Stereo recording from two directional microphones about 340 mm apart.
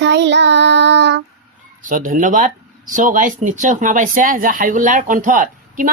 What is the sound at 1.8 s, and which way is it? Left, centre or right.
Speech, right.